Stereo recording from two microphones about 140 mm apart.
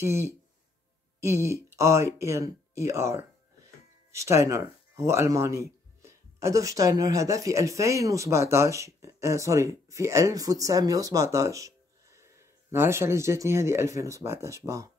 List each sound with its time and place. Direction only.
0.0 s speech: 20° right (ahead or behind)